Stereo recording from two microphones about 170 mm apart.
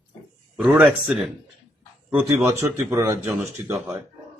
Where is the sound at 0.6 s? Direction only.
5° right (ahead or behind).